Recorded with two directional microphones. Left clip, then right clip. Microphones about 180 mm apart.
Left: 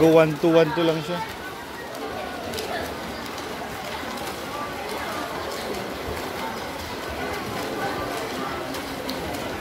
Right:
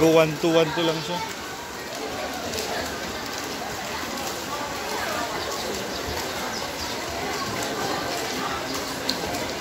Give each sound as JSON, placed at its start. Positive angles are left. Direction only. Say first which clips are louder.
{"t": 0.0, "sound": "speech", "louder": "left 2 dB", "side_deg": 20}